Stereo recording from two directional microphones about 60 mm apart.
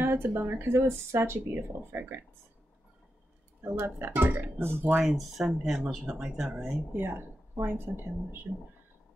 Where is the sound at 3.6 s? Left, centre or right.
Right.